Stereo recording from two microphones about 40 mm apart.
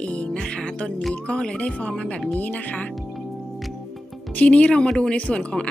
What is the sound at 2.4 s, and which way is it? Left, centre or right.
Speech, left.